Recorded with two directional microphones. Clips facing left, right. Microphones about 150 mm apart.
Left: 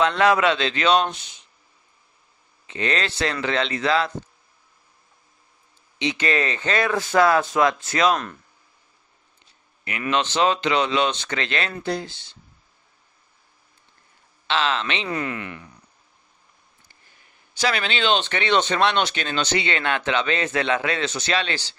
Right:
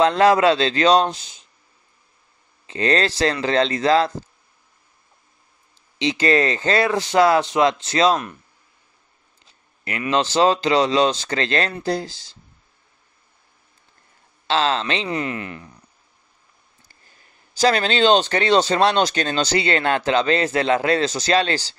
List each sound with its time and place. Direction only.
0.0 s speech: 35° right (ahead or behind)
2.6 s speech: 35° right (ahead or behind)
5.9 s speech: 35° right (ahead or behind)
9.8 s speech: 30° right (ahead or behind)
14.5 s speech: 35° right (ahead or behind)
15.0 s speech: 25° right (ahead or behind)
17.6 s speech: 40° right (ahead or behind)